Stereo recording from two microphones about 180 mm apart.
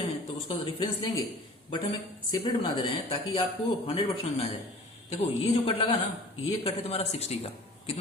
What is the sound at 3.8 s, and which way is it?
Speech, 35° left (ahead or behind).